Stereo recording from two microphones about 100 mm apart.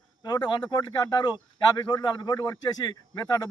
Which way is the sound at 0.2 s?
45° left (ahead or behind).